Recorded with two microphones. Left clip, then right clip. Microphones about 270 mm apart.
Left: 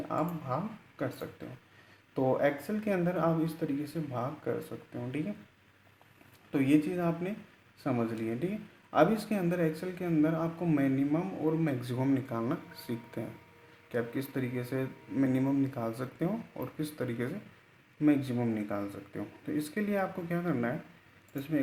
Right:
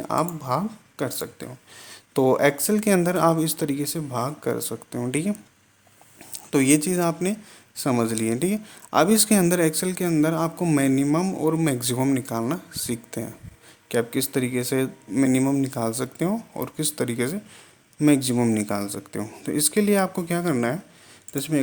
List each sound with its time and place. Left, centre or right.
0.1 s speech: right
6.5 s speech: right